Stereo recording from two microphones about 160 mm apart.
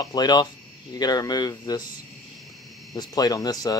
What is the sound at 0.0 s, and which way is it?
Speech, 25° left (ahead or behind).